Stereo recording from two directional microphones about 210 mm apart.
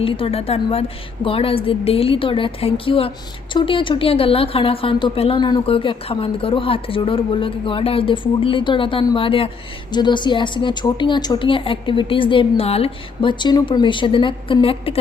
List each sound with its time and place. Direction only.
0.0 s a woman's voice: 25° left (ahead or behind)